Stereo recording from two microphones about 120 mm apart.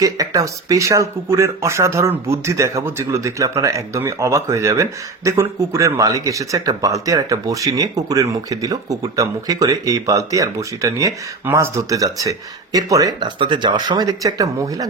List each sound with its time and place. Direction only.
0.0 s speech: 30° right (ahead or behind)